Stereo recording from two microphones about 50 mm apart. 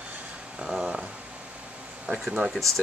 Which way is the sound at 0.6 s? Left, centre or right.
Centre.